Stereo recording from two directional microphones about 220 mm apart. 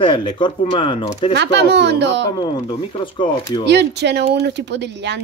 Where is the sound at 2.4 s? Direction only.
20° left (ahead or behind).